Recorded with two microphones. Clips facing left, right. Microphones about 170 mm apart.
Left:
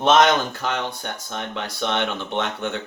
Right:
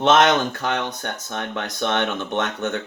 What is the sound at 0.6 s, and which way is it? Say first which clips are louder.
Speech: right 1 dB; 15° right (ahead or behind).